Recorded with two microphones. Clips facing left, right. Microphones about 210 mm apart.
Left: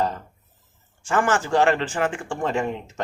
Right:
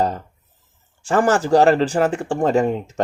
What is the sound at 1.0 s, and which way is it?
Speech, 35° right (ahead or behind).